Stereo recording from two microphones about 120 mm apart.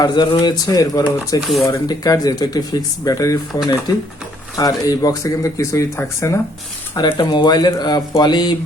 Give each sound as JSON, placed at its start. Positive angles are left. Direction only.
{"t": 0.0, "sound": "speech", "side_deg": 35}
{"t": 1.4, "sound": "speech", "side_deg": 0}
{"t": 1.6, "sound": "speech", "side_deg": 30}
{"t": 7.2, "sound": "speech", "side_deg": 40}